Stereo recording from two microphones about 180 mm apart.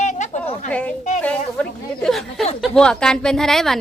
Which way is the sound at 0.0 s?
40° left (ahead or behind).